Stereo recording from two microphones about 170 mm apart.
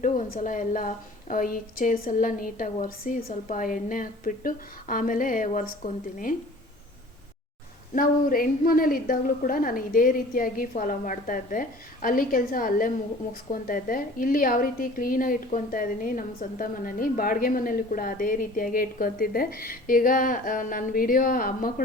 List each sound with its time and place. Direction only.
0.0 s a woman's voice: 50° left (ahead or behind)
7.9 s a woman's voice: 55° left (ahead or behind)